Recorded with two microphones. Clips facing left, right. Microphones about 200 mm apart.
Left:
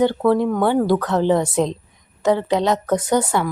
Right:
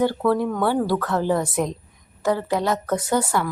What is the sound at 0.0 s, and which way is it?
Speech, 20° left (ahead or behind).